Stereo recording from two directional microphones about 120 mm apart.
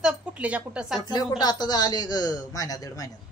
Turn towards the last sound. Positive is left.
turn(degrees=30)  # may be behind; listen again after turning